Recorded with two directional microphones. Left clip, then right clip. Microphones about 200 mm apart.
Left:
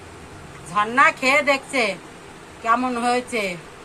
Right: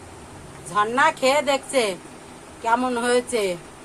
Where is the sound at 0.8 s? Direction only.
20° right (ahead or behind).